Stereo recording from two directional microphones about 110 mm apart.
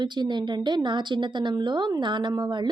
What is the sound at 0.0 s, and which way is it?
A woman's voice, 45° right (ahead or behind).